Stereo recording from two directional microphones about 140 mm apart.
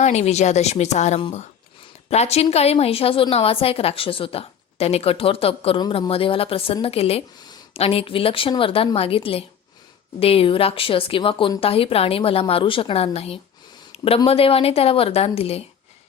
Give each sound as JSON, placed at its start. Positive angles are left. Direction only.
{"t": 0.0, "sound": "a woman's voice", "side_deg": 50}
{"t": 13.9, "sound": "a sound", "side_deg": 45}
{"t": 14.3, "sound": "a woman's voice", "side_deg": 45}